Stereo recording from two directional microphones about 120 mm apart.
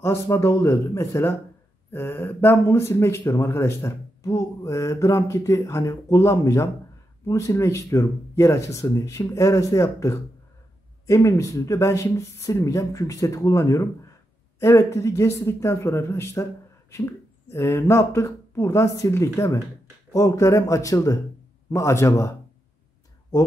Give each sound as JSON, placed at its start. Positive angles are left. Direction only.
{"t": 0.0, "sound": "speech", "side_deg": 25}